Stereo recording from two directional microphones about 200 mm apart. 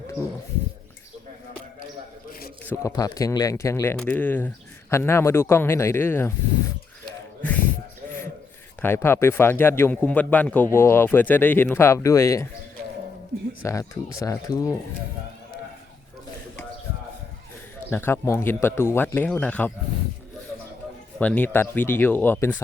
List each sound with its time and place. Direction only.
2.6 s speech: 15° left (ahead or behind)
8.8 s speech: 10° left (ahead or behind)
13.6 s speech: 15° left (ahead or behind)
17.9 s speech: 10° left (ahead or behind)
21.2 s speech: 10° left (ahead or behind)